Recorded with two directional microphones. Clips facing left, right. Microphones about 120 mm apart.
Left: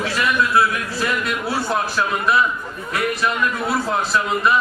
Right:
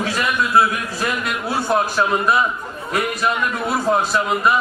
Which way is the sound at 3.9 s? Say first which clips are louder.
Right 3 dB; 20° right (ahead or behind).